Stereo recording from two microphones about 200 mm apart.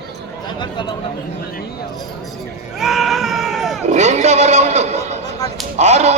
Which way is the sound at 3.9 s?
35° right (ahead or behind).